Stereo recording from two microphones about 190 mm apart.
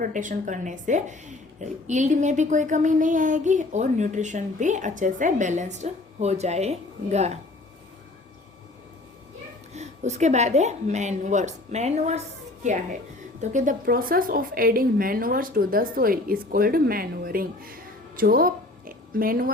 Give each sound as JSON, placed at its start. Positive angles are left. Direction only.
{"t": 0.0, "sound": "speech", "side_deg": -40}
{"t": 9.7, "sound": "speech", "side_deg": -35}
{"t": 13.4, "sound": "speech", "side_deg": -40}
{"t": 18.2, "sound": "a sound", "side_deg": -50}